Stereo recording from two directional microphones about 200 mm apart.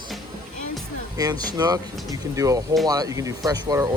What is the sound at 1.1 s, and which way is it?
Speech, 20° right (ahead or behind).